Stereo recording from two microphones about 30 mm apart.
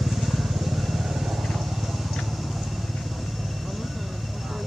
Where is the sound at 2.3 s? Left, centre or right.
Centre.